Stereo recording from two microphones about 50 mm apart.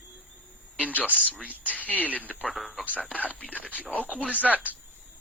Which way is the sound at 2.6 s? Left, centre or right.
Centre.